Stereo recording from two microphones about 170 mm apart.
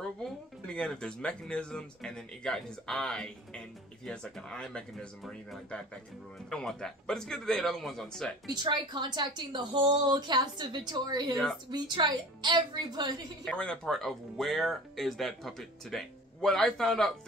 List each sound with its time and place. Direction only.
0.2 s speech: 5° left (ahead or behind)
8.6 s a woman's voice: 25° right (ahead or behind)
13.5 s speech: 5° left (ahead or behind)